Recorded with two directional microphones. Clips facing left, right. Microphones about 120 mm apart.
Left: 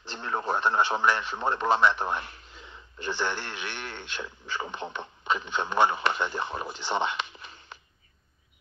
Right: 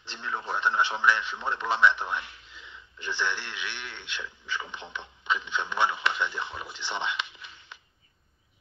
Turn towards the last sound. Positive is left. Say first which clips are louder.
# left 2 dB
turn(degrees=45)  # may be behind; listen again after turning